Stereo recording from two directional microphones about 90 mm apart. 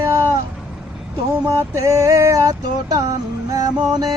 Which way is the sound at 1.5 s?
35° right (ahead or behind).